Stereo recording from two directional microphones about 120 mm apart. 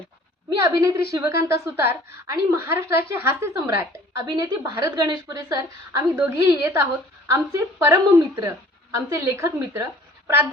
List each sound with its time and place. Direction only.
0.6 s a woman's voice: 25° right (ahead or behind)